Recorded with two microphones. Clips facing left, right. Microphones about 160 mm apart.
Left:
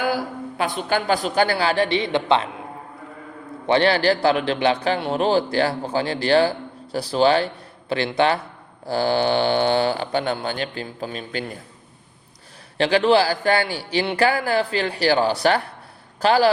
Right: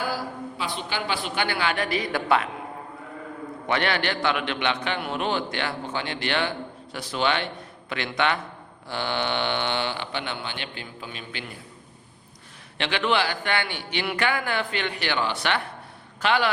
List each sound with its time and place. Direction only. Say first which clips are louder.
0.1 s speech: left 6 dB; 55° left (ahead or behind); by 2.5 s 25° left (ahead or behind)
3.7 s speech: left 8 dB; 30° left (ahead or behind)
12.7 s speech: left 8 dB; 35° left (ahead or behind)